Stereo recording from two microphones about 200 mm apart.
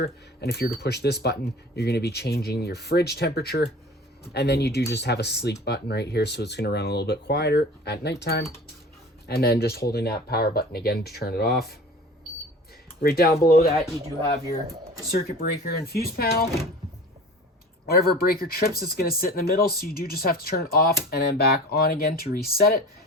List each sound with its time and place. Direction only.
0.0 s speech: 50° left (ahead or behind)
13.0 s speech: 50° left (ahead or behind)
15.4 s speech: 50° left (ahead or behind)
17.8 s speech: 50° left (ahead or behind)